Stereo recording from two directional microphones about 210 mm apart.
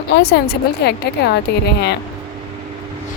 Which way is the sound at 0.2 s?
50° left (ahead or behind).